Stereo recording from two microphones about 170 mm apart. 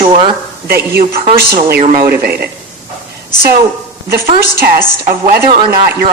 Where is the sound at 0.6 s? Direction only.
65° right (ahead or behind).